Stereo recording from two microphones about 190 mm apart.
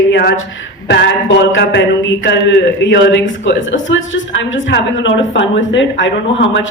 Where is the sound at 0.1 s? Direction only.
60° left (ahead or behind).